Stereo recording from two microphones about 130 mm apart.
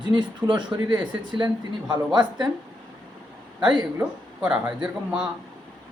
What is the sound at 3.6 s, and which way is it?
Speech, 35° right (ahead or behind).